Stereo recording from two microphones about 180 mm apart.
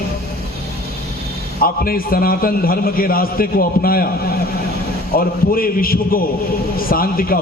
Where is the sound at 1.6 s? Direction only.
55° left (ahead or behind).